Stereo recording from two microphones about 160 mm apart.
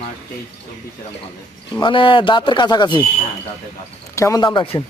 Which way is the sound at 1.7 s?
30° left (ahead or behind).